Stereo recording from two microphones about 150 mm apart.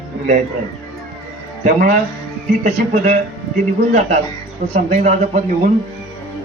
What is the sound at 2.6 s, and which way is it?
Speech, 50° right (ahead or behind).